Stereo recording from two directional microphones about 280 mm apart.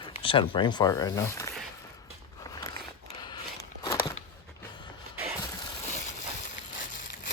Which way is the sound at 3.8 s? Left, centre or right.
Centre.